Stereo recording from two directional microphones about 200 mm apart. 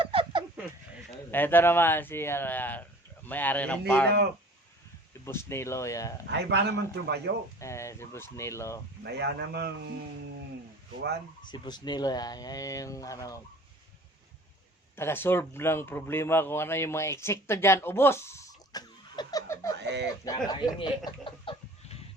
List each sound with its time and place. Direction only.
0.0 s a sound: 25° right (ahead or behind)
1.3 s speech: 10° left (ahead or behind)
5.2 s speech: 10° left (ahead or behind)
6.3 s a man's voice: 60° right (ahead or behind)
7.6 s speech: 15° left (ahead or behind)
9.0 s a man's voice: 55° right (ahead or behind)
11.4 s speech: 20° left (ahead or behind)
14.9 s speech: 10° left (ahead or behind)
19.8 s speech: 60° right (ahead or behind)
20.2 s speech: 20° left (ahead or behind)
20.7 s a sound: 25° left (ahead or behind)